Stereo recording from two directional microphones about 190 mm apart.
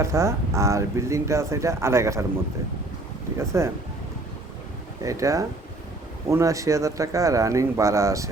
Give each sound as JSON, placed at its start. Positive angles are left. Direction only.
{"t": 0.0, "sound": "speech", "side_deg": -15}
{"t": 3.3, "sound": "speech", "side_deg": -15}
{"t": 5.0, "sound": "speech", "side_deg": -15}